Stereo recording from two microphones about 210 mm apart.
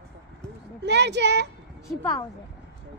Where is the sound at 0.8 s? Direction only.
55° right (ahead or behind).